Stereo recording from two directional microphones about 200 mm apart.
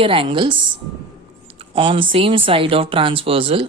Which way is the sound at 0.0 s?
25° right (ahead or behind).